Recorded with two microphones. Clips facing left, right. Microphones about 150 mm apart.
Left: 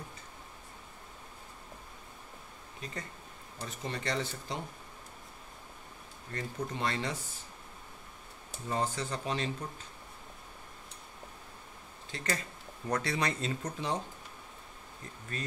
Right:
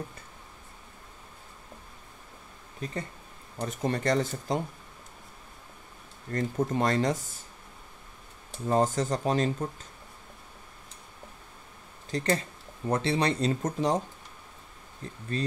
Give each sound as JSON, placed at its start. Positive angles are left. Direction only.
{"t": 3.5, "sound": "speech", "side_deg": -50}
{"t": 6.3, "sound": "speech", "side_deg": -45}
{"t": 8.6, "sound": "speech", "side_deg": -45}
{"t": 12.1, "sound": "speech", "side_deg": -30}
{"t": 15.3, "sound": "speech", "side_deg": -30}